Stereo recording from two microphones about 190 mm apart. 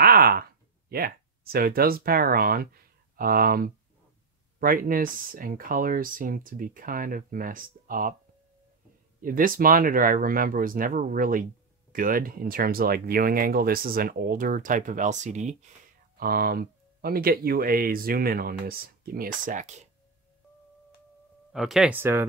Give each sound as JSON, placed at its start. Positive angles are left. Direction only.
{"t": 0.0, "sound": "speech", "side_deg": -50}
{"t": 9.2, "sound": "speech", "side_deg": -45}
{"t": 16.2, "sound": "speech", "side_deg": -50}
{"t": 21.5, "sound": "speech", "side_deg": 0}